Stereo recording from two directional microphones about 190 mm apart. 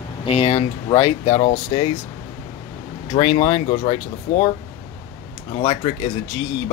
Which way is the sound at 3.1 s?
25° left (ahead or behind).